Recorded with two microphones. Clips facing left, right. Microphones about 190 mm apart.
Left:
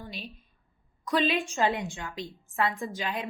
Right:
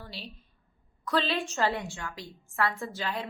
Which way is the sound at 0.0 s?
15° left (ahead or behind).